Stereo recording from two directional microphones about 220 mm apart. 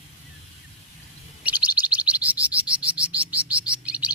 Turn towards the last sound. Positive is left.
turn(degrees=-5)  # may be behind; listen again after turning